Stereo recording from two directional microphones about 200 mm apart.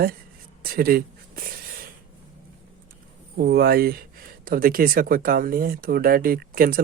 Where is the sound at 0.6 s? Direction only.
45° right (ahead or behind).